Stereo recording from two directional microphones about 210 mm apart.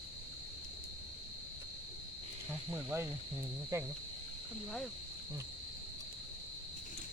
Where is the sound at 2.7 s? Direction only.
10° right (ahead or behind).